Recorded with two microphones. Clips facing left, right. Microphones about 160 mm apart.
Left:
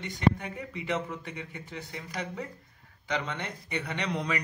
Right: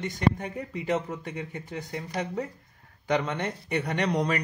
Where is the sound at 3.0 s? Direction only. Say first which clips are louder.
Right 6 dB; 45° right (ahead or behind).